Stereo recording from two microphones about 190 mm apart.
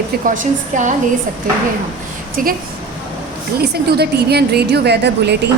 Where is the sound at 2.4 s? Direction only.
45° right (ahead or behind).